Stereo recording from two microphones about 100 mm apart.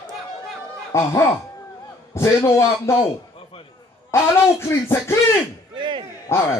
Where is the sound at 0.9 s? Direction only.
30° left (ahead or behind).